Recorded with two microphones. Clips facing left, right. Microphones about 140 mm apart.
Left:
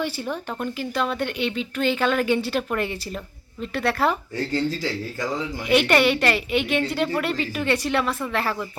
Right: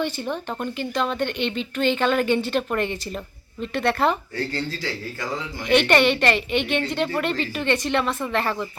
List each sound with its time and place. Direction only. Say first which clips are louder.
0.0 s a woman's voice: right 1 dB; 5° left (ahead or behind)
5.6 s a woman's voice: right 1 dB; 5° left (ahead or behind)